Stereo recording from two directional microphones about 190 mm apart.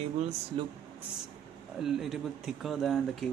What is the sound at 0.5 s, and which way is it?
Speech, 30° right (ahead or behind).